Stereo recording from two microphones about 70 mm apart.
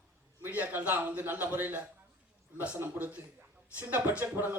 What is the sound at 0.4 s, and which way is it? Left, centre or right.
A man's voice, right.